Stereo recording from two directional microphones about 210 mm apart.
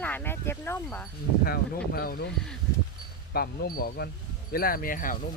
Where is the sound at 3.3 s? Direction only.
45° left (ahead or behind).